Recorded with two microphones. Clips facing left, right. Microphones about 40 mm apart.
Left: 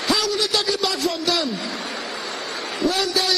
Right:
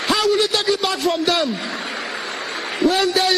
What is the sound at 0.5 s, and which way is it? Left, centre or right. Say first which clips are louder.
Speech: right 3 dB; right.